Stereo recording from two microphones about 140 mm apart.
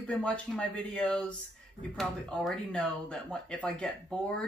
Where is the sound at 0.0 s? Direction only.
5° left (ahead or behind).